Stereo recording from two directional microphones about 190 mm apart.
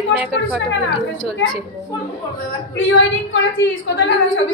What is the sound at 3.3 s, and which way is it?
A woman's voice, 70° left (ahead or behind).